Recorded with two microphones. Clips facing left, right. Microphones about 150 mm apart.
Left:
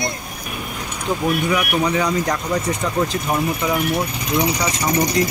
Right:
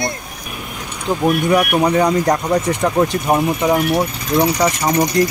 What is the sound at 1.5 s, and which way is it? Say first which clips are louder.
Speech: right 5 dB; 45° right (ahead or behind).